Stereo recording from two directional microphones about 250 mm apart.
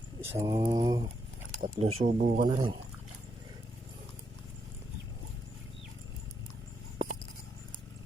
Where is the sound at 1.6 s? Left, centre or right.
Right.